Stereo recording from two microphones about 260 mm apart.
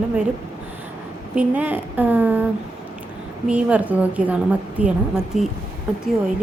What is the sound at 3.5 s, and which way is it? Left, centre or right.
A woman's voice, centre.